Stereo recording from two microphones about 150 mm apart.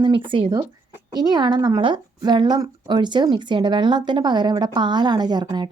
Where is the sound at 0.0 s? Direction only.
35° right (ahead or behind).